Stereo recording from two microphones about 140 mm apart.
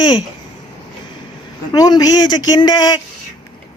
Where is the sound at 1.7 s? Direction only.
30° left (ahead or behind).